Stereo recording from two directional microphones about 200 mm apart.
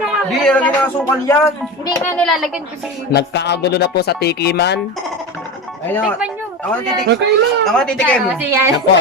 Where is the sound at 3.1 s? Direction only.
60° left (ahead or behind).